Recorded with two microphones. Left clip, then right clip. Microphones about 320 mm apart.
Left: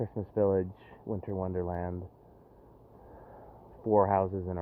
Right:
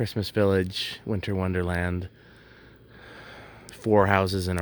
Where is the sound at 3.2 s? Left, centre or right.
Right.